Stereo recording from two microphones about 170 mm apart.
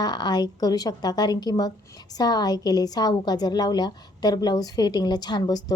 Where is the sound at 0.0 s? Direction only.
25° left (ahead or behind).